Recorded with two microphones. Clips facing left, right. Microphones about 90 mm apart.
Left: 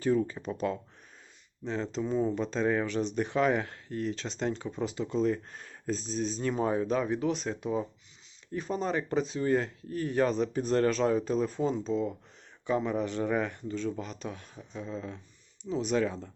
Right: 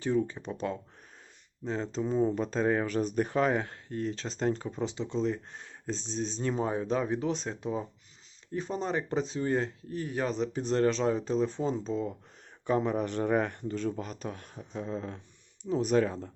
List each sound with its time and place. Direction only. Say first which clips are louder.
0.0 s speech: left 1 dB; 20° right (ahead or behind)
2.0 s speech: right 2 dB; 20° right (ahead or behind)
2.5 s speech: right 1 dB; 35° right (ahead or behind)
4.7 s speech: left 1 dB; 25° right (ahead or behind)
11.8 s speech: left 2 dB; centre (ahead or behind)
12.6 s speech: right 1 dB; 40° right (ahead or behind)
13.0 s speech: right 1 dB; 50° right (ahead or behind)